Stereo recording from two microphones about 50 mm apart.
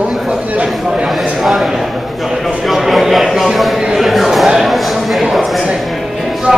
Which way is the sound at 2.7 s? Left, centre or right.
Centre.